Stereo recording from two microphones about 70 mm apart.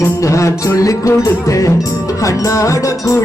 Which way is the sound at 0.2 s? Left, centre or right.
Left.